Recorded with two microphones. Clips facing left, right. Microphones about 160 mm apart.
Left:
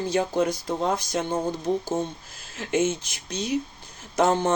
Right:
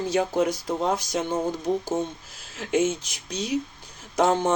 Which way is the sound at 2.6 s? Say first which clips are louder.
Right 1 dB; centre (ahead or behind).